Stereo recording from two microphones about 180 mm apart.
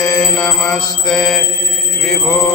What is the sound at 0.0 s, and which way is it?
Mantra, 20° left (ahead or behind).